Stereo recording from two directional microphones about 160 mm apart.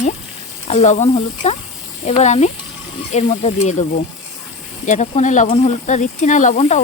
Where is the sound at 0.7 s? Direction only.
45° left (ahead or behind).